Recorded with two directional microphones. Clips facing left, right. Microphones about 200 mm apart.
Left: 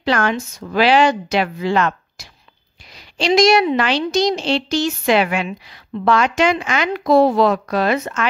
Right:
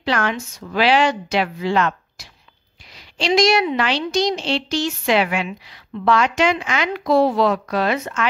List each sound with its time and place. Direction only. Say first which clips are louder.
0.0 s a woman's voice: left 3 dB; 45° left (ahead or behind)